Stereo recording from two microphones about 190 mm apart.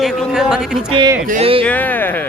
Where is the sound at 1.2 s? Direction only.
40° right (ahead or behind).